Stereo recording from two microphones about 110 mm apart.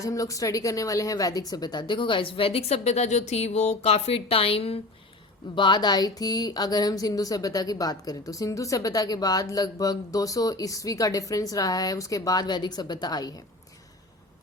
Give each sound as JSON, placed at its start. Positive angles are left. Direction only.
{"t": 0.0, "sound": "a woman's voice", "side_deg": 30}
{"t": 5.5, "sound": "speech", "side_deg": 45}